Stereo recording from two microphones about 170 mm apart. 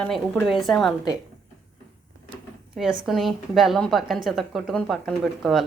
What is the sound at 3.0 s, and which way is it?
A woman's voice, centre (ahead or behind).